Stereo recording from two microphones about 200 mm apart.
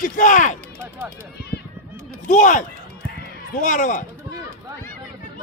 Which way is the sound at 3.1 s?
40° left (ahead or behind).